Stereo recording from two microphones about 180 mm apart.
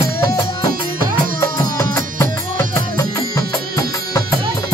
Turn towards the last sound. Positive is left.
turn(degrees=20)  # may be behind; listen again after turning